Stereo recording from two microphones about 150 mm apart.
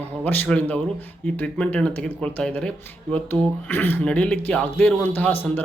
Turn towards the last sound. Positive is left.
turn(degrees=10)  # may be behind; listen again after turning